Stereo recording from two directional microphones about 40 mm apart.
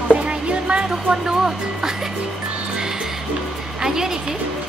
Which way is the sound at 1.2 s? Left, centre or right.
Centre.